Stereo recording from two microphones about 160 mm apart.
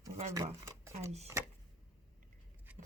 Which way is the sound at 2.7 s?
10° right (ahead or behind).